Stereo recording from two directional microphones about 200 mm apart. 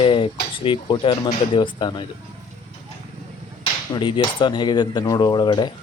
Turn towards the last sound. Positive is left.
turn(degrees=20)  # may be behind; listen again after turning